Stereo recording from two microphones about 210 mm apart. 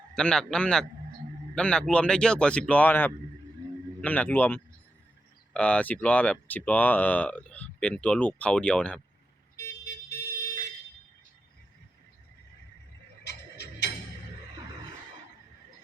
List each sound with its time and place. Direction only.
0.2 s speech: 5° left (ahead or behind)
3.6 s a sound: 15° right (ahead or behind)
4.0 s speech: 5° left (ahead or behind)
9.6 s car alarm: 50° left (ahead or behind)
13.2 s tick-tock: 55° left (ahead or behind)